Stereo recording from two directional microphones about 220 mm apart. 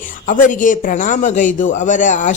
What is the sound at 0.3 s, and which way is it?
Speech, 35° left (ahead or behind).